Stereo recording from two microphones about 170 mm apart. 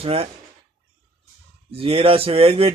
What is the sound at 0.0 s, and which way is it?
Speech, 35° right (ahead or behind).